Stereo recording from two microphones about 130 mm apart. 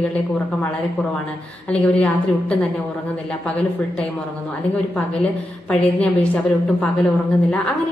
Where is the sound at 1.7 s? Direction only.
5° left (ahead or behind).